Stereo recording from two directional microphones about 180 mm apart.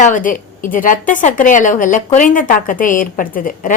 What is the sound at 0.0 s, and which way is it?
A woman's voice, 45° left (ahead or behind).